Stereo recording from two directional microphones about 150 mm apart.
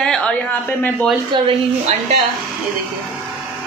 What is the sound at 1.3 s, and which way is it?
Speech, 35° right (ahead or behind).